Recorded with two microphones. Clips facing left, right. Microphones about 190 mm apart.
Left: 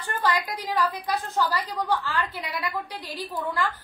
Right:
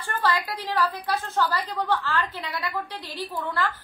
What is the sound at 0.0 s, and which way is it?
A woman's voice, 15° left (ahead or behind).